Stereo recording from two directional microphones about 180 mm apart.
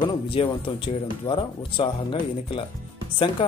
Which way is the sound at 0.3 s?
30° left (ahead or behind).